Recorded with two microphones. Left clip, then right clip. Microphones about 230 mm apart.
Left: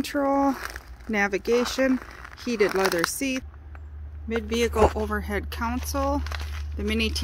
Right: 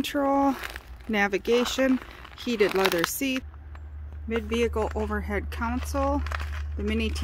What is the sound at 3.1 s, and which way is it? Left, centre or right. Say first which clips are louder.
Speech: even; centre.